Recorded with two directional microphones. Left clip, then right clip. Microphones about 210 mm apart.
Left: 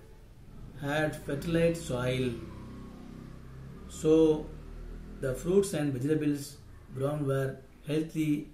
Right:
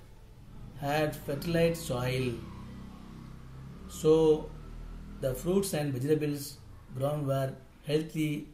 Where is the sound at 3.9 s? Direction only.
45° right (ahead or behind).